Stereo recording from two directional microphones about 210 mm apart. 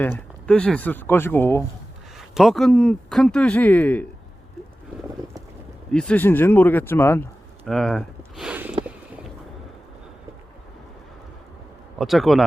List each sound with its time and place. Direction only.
0.0 s speech: 5° left (ahead or behind)
2.3 s speech: centre (ahead or behind)
5.9 s speech: 5° left (ahead or behind)
11.9 s speech: centre (ahead or behind)